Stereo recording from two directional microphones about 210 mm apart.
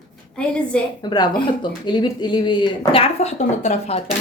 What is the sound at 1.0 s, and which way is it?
Speech, 20° left (ahead or behind).